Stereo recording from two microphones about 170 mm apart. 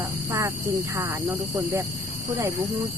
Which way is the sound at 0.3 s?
20° right (ahead or behind).